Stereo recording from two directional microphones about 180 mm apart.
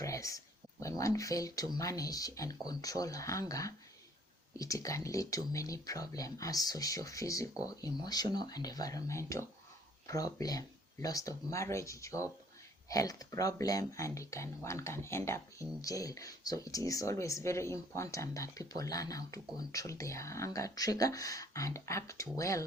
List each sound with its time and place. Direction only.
0.0 s speech: 20° left (ahead or behind)